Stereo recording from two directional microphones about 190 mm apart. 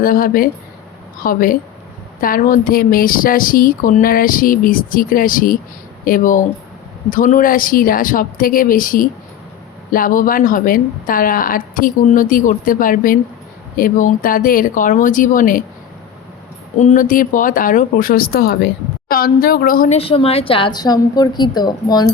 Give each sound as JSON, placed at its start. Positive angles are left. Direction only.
{"t": 0.0, "sound": "speech", "side_deg": 50}
{"t": 16.8, "sound": "speech", "side_deg": 45}
{"t": 20.0, "sound": "a woman's voice", "side_deg": 30}